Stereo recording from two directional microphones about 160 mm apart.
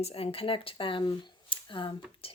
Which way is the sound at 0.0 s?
35° left (ahead or behind).